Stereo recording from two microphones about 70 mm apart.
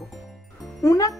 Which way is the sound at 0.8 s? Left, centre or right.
Left.